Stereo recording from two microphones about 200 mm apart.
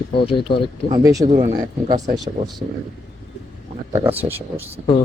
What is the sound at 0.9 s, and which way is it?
Speech, 20° right (ahead or behind).